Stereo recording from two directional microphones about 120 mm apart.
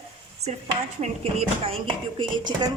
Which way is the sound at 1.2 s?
55° right (ahead or behind).